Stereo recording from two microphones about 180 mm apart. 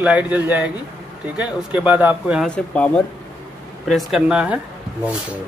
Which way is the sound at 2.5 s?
5° left (ahead or behind).